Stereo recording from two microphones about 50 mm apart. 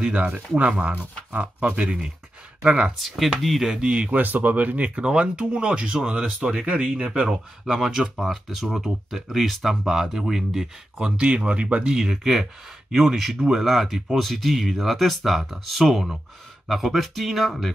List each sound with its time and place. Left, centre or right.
0.0 s speech: right
3.0 s speech: centre
3.9 s speech: right
4.2 s speech: right
7.2 s speech: centre
11.1 s speech: right
12.0 s speech: centre